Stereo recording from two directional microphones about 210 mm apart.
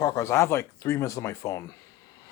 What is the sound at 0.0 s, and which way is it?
Speech, 15° left (ahead or behind).